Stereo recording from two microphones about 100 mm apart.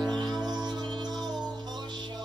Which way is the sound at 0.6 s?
50° right (ahead or behind).